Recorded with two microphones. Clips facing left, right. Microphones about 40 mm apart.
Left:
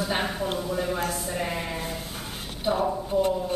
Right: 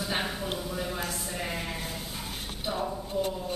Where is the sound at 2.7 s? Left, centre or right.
Centre.